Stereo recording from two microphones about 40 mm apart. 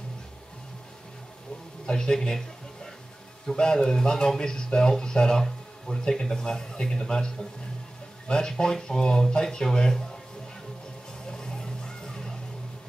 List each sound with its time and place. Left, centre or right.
1.9 s speech: centre
3.7 s speech: centre
11.3 s a sound: centre